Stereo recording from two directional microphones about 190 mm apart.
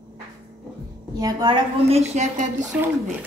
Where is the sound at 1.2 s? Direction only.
25° right (ahead or behind).